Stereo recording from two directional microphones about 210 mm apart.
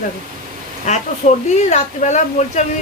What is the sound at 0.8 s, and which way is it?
Speech, 35° left (ahead or behind).